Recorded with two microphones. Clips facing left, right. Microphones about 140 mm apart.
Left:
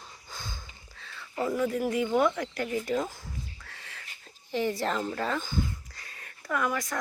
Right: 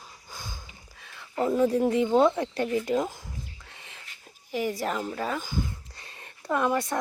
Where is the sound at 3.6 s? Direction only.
20° right (ahead or behind).